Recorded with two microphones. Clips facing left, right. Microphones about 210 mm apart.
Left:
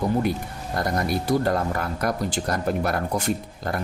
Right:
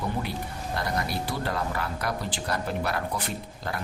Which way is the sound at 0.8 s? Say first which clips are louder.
Left 6 dB; 45° left (ahead or behind).